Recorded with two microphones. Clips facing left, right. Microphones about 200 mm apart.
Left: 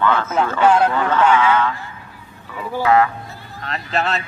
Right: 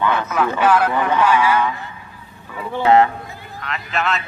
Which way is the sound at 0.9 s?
15° right (ahead or behind).